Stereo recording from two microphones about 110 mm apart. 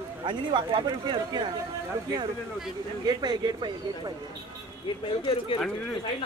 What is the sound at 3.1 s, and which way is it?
Speech, 40° right (ahead or behind).